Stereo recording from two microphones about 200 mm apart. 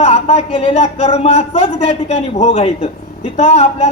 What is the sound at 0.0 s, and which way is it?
A man's voice, 30° left (ahead or behind).